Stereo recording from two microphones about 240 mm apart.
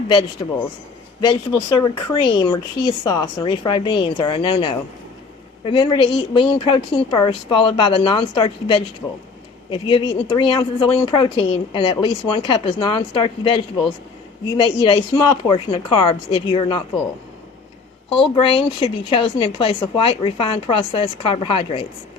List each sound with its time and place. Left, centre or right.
0.4 s a woman's voice: left
18.3 s a woman's voice: left